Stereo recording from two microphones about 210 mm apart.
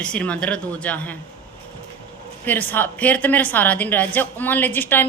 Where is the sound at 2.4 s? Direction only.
10° left (ahead or behind).